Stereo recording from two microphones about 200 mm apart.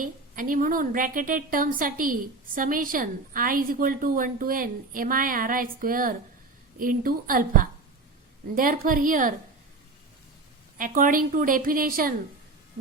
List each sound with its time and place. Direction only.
0.0 s a woman's voice: 45° right (ahead or behind)
10.8 s a woman's voice: 40° right (ahead or behind)